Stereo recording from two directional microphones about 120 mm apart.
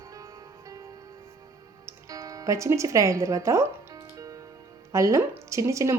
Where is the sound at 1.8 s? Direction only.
30° right (ahead or behind).